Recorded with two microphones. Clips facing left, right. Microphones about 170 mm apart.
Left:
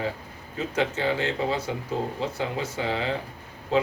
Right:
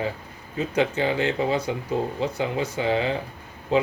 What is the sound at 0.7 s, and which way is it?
Speech, 15° right (ahead or behind).